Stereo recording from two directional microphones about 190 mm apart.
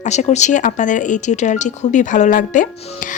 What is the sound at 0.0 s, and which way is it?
Speech, 40° left (ahead or behind).